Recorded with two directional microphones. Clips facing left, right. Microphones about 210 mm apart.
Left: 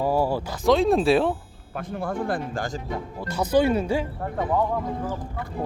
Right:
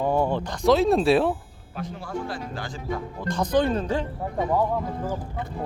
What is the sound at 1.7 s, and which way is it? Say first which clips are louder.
Speech: left 3 dB; 55° left (ahead or behind).